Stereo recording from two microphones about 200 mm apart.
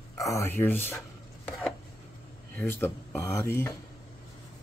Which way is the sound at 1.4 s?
Centre (ahead or behind).